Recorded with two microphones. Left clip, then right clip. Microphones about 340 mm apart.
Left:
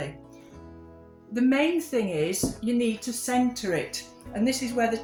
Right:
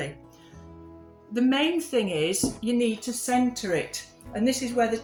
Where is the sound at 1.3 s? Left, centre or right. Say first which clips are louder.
Even; left.